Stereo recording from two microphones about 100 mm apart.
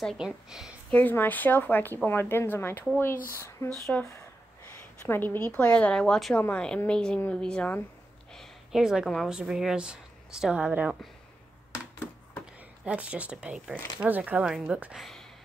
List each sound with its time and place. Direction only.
0.0 s a woman's voice: centre (ahead or behind)
0.9 s speech: 20° left (ahead or behind)
5.0 s speech: 20° left (ahead or behind)
8.4 s a sound: 5° right (ahead or behind)
9.3 s speech: 5° right (ahead or behind)
12.8 s speech: 15° right (ahead or behind)